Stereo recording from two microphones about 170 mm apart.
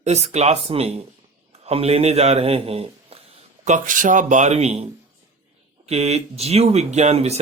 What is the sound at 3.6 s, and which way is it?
Speech, 50° right (ahead or behind).